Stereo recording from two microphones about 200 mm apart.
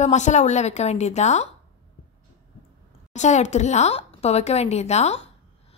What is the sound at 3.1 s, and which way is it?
A woman's voice, 35° left (ahead or behind).